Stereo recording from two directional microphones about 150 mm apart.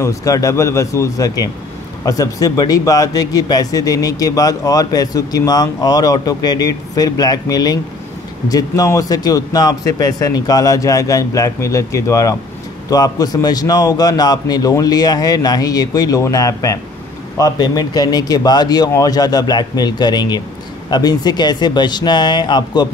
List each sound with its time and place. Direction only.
0.0 s speech: 20° left (ahead or behind)